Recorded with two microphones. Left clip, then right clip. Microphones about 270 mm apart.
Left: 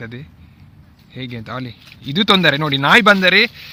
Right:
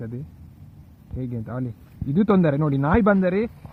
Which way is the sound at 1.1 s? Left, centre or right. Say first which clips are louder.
Left 5 dB; centre.